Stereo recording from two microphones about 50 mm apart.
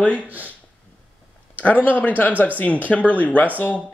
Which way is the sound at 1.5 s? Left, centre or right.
Left.